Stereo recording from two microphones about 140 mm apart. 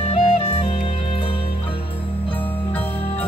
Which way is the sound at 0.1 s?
40° left (ahead or behind).